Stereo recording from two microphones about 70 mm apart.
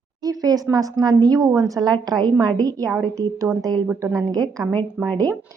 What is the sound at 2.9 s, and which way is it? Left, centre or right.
Speech, right.